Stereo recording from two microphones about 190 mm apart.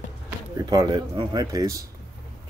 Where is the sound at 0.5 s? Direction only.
20° right (ahead or behind).